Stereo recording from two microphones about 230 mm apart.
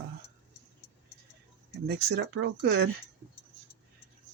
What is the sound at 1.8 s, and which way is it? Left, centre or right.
Speech, right.